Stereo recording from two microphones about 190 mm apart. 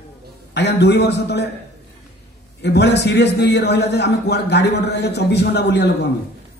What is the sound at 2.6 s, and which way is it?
A man's voice, 60° left (ahead or behind).